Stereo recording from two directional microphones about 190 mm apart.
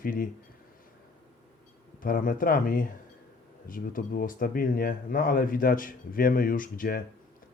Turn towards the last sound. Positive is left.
turn(degrees=50)  # may be behind; listen again after turning